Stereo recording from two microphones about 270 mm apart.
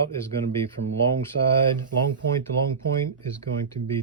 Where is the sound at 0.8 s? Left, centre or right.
Right.